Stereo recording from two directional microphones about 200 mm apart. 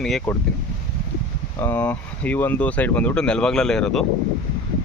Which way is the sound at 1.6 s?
10° left (ahead or behind).